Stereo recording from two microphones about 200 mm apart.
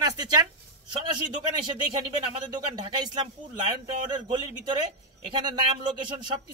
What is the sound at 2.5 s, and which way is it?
Speech, 20° right (ahead or behind).